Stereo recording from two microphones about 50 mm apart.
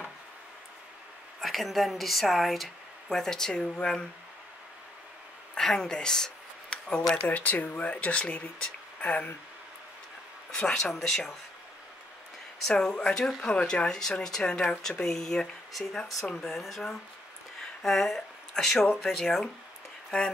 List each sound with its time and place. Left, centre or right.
1.4 s speech: centre
3.1 s speech: centre
5.6 s a sound: centre
7.2 s speech: left
10.5 s speech: centre
12.6 s speech: centre
13.6 s speech: left
13.8 s speech: centre
14.8 s speech: centre